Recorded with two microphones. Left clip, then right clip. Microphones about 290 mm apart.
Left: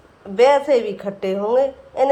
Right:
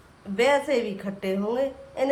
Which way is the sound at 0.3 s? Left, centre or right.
Centre.